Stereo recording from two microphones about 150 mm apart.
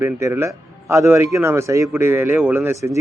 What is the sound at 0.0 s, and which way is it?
Speech, 20° right (ahead or behind).